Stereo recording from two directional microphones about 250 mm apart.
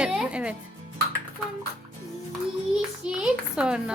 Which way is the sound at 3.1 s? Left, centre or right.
Centre.